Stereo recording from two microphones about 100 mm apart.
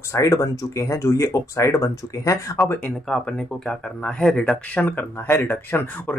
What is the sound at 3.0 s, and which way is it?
Speech, 5° left (ahead or behind).